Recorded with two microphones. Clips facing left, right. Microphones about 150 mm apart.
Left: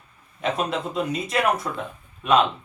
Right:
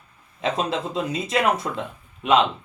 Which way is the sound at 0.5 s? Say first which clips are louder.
Even; 25° right (ahead or behind).